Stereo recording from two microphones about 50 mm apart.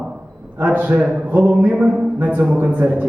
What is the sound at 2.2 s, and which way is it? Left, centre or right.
Speech, right.